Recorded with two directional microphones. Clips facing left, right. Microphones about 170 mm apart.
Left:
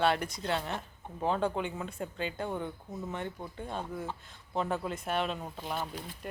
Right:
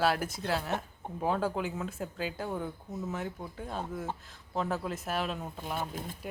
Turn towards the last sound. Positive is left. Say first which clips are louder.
# right 2 dB
turn(degrees=-5)  # may be behind; listen again after turning